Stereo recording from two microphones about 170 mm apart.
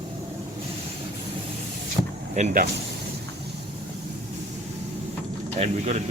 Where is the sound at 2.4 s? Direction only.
45° right (ahead or behind).